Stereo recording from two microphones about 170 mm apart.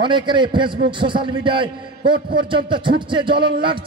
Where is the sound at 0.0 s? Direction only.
30° right (ahead or behind).